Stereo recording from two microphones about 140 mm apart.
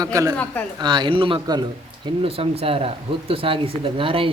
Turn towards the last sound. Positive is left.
turn(degrees=-40)  # may be behind; listen again after turning